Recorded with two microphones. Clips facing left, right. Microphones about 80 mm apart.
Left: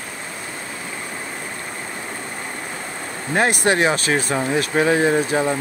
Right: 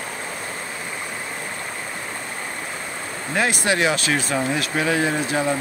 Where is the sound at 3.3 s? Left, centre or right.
Left.